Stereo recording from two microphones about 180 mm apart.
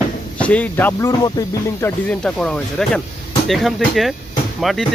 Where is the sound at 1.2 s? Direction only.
20° left (ahead or behind).